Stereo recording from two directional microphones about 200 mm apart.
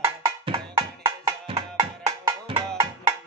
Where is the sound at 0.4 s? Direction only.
20° right (ahead or behind).